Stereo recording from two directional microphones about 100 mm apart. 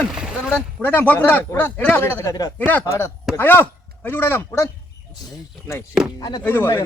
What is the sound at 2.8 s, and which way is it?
Speech, 30° left (ahead or behind).